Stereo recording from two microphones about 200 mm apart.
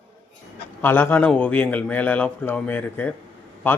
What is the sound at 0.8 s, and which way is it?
A man's voice, 10° left (ahead or behind).